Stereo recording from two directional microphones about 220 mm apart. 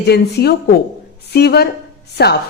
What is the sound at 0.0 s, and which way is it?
A woman's voice, 50° left (ahead or behind).